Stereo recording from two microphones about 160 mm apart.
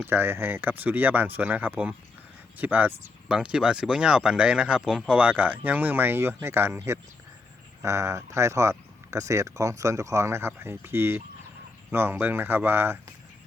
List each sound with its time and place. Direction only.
0.0 s speech: 15° right (ahead or behind)